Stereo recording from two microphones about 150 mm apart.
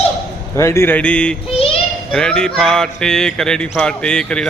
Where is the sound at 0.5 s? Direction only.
20° left (ahead or behind).